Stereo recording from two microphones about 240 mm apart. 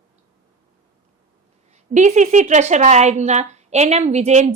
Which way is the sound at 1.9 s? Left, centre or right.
Right.